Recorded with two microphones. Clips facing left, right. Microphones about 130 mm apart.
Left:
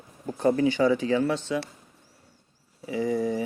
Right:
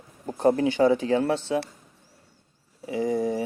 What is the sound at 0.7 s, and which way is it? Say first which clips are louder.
Speech: right 2 dB; 50° right (ahead or behind).